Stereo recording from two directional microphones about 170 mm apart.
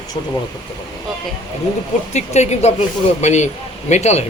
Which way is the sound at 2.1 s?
40° left (ahead or behind).